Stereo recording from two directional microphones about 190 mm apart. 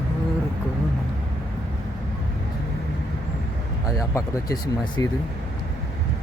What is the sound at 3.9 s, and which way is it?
Speech, 20° left (ahead or behind).